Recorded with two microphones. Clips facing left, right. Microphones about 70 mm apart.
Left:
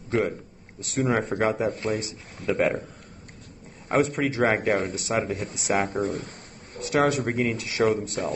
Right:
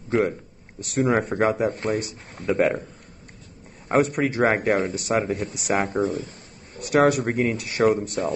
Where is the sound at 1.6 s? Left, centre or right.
Right.